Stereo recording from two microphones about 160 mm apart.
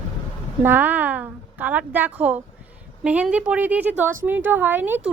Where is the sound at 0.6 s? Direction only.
10° right (ahead or behind).